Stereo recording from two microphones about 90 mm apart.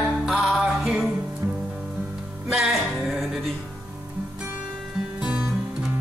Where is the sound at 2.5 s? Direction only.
Centre (ahead or behind).